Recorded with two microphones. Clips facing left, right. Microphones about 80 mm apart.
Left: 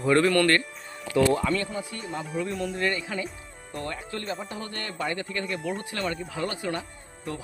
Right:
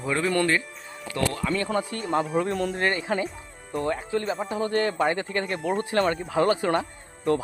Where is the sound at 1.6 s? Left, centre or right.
Right.